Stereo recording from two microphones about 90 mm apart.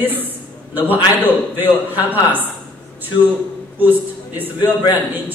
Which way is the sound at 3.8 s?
20° right (ahead or behind).